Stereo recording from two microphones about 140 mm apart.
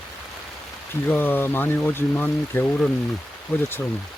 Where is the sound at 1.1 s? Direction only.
15° left (ahead or behind).